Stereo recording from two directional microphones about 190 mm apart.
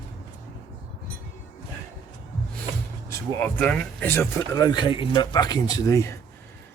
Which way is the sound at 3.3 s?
5° left (ahead or behind).